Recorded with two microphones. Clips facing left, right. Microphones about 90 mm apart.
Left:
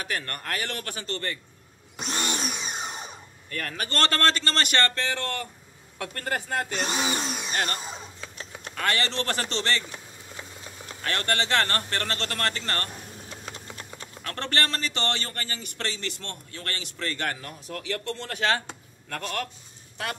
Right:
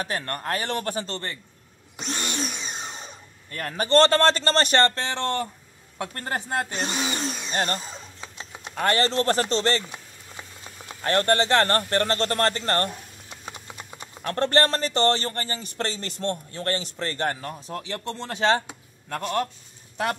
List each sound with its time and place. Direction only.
0.0 s a man's voice: 25° right (ahead or behind)
2.0 s tools: 15° left (ahead or behind)
3.4 s a man's voice: 25° right (ahead or behind)
6.9 s speech: 15° left (ahead or behind)
7.5 s a man's voice: 25° right (ahead or behind)
8.2 s a sound: 20° right (ahead or behind)
8.9 s speech: 35° right (ahead or behind)
10.9 s speech: 30° right (ahead or behind)
13.3 s a sound: 15° right (ahead or behind)
14.3 s a man's voice: 35° right (ahead or behind)